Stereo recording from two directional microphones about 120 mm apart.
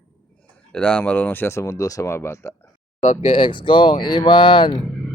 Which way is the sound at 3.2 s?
45° left (ahead or behind).